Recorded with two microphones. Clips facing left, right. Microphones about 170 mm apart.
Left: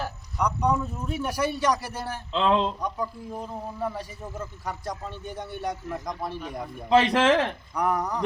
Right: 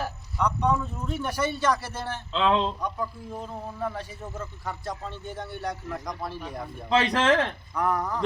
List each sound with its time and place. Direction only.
0.3 s a man's voice: 10° left (ahead or behind)